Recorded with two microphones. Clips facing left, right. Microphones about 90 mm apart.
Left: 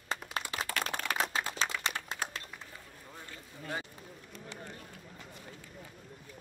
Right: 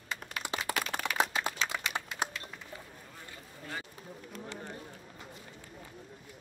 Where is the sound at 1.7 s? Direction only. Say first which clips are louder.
Left 1 dB; 20° right (ahead or behind).